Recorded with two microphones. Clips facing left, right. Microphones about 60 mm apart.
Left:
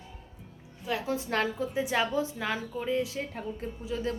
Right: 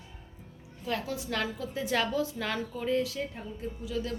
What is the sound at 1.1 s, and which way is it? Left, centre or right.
Speech, left.